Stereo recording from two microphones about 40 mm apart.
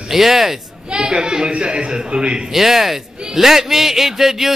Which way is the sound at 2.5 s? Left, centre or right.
Centre.